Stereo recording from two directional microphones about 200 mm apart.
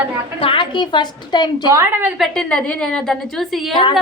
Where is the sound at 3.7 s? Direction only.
25° left (ahead or behind).